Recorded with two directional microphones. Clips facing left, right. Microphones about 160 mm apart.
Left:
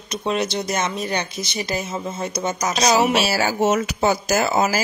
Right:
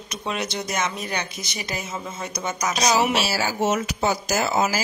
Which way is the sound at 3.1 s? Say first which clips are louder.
Left 4 dB; 60° left (ahead or behind).